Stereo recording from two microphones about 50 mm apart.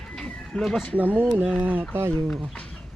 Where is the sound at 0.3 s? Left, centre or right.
Centre.